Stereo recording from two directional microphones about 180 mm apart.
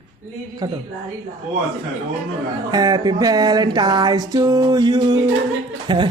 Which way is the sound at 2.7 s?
20° right (ahead or behind).